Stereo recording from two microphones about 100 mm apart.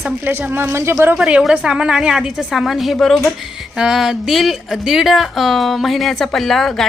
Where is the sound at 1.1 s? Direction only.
10° right (ahead or behind).